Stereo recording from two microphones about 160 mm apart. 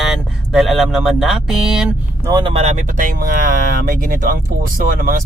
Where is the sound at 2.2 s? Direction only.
25° right (ahead or behind).